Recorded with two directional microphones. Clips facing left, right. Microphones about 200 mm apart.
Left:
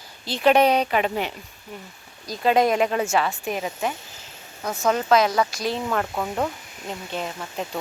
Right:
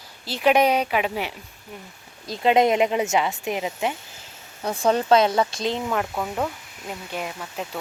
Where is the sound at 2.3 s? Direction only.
20° right (ahead or behind).